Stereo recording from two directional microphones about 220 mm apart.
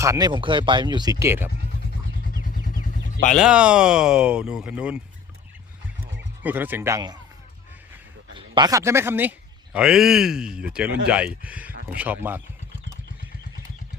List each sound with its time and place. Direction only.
0.0 s speech: 15° right (ahead or behind)
1.7 s vehicle: 45° left (ahead or behind)
3.3 s speech: 5° right (ahead or behind)
6.4 s speech: 10° right (ahead or behind)
8.4 s speech: 20° right (ahead or behind)